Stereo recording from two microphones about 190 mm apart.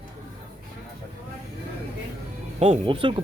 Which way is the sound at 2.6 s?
30° right (ahead or behind).